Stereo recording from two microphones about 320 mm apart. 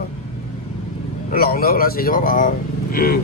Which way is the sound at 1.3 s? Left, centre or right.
Left.